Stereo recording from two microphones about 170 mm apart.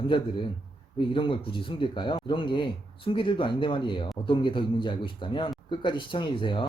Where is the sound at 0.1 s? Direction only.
30° left (ahead or behind).